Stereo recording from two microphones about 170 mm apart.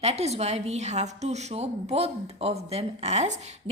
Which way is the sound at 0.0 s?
40° right (ahead or behind).